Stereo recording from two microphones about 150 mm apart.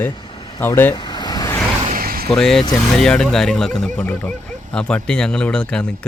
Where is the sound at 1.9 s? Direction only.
75° right (ahead or behind).